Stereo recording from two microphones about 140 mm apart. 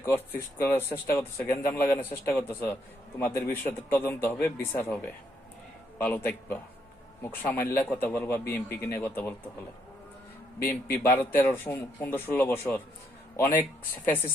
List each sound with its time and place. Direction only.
0.0 s speech: 15° left (ahead or behind)
6.0 s speech: 15° left (ahead or behind)
10.6 s speech: 15° left (ahead or behind)